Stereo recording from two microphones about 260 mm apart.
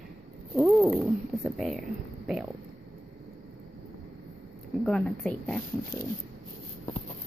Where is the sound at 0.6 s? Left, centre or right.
Centre.